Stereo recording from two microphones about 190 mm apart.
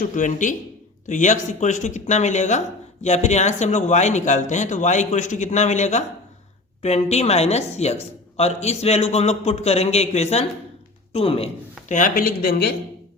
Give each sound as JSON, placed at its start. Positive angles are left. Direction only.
{"t": 0.1, "sound": "speech", "side_deg": 40}
{"t": 11.9, "sound": "speech", "side_deg": 45}